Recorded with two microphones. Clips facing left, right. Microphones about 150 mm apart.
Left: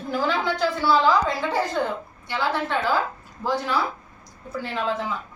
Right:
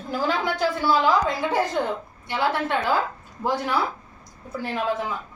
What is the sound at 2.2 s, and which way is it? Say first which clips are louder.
Speech: right 1 dB; 15° right (ahead or behind).